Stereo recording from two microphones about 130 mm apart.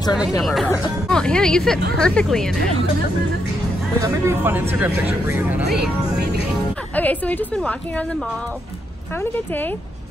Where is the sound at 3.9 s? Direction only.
25° right (ahead or behind).